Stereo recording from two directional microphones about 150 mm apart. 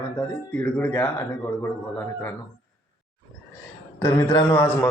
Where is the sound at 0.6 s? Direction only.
10° left (ahead or behind).